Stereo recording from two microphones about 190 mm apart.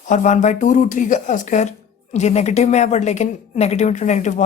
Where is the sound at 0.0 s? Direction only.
40° left (ahead or behind).